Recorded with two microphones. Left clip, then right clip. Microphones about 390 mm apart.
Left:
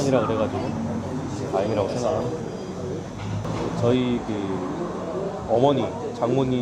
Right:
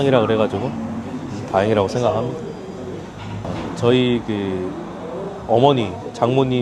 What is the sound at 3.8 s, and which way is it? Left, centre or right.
Speech, right.